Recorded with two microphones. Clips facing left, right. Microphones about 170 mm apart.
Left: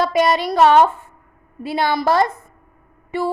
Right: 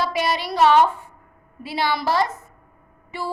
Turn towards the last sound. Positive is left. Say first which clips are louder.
# left 8 dB
turn(degrees=50)  # may be behind; listen again after turning